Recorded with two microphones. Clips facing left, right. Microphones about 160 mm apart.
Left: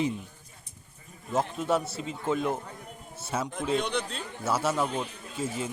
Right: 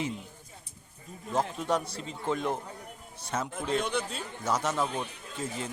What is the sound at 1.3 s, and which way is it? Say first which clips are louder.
A man's voice: left 2 dB; 5° left (ahead or behind).